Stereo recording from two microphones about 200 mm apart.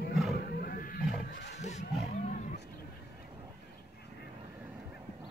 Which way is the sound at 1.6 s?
35° left (ahead or behind).